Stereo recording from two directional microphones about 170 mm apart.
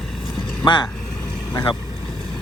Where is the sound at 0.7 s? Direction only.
25° left (ahead or behind).